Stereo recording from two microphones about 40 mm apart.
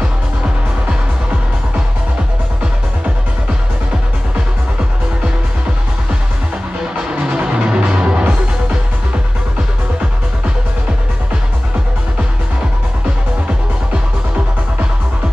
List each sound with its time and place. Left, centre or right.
7.0 s music: right